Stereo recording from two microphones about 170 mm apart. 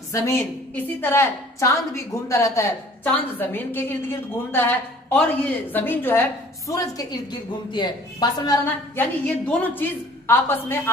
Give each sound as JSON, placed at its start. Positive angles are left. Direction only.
{"t": 0.1, "sound": "a woman's voice", "side_deg": 15}
{"t": 8.9, "sound": "a woman's voice", "side_deg": 10}